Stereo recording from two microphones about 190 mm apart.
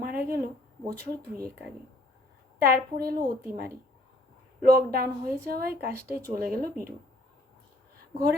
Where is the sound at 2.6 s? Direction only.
55° right (ahead or behind).